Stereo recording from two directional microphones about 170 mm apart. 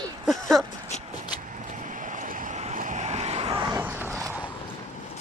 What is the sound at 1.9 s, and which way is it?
Vehicle, 50° right (ahead or behind).